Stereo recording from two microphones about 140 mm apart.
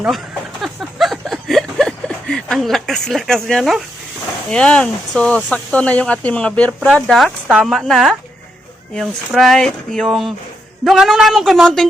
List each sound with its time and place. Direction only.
0.6 s a sound: centre (ahead or behind)
4.4 s speech: 5° left (ahead or behind)
6.7 s speech: 5° right (ahead or behind)